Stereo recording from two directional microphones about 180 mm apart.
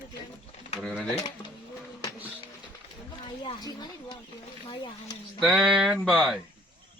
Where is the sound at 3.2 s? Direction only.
25° left (ahead or behind).